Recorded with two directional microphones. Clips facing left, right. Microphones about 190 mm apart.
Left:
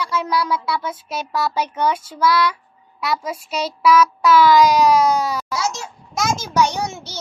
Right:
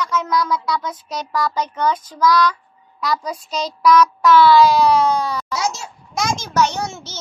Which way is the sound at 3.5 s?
5° left (ahead or behind).